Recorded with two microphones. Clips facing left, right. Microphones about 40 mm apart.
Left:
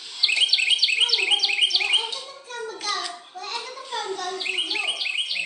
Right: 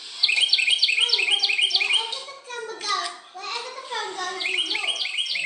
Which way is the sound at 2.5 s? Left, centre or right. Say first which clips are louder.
Right 1 dB; centre.